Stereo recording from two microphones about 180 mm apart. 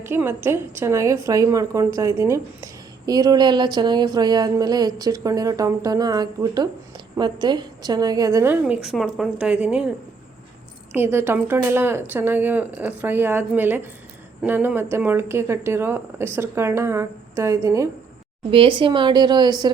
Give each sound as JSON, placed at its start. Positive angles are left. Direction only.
{"t": 0.0, "sound": "speech", "side_deg": -15}
{"t": 8.6, "sound": "speech", "side_deg": -5}
{"t": 10.9, "sound": "speech", "side_deg": -15}
{"t": 18.5, "sound": "speech", "side_deg": -30}